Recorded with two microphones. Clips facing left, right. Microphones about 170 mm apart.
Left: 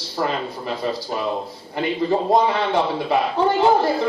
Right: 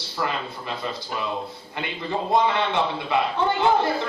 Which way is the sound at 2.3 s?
40° left (ahead or behind).